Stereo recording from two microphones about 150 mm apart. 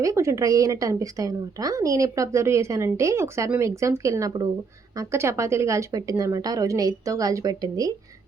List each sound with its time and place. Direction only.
0.0 s a woman's voice: 20° right (ahead or behind)